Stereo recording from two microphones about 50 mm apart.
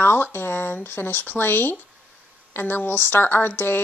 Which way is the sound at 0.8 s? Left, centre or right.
Left.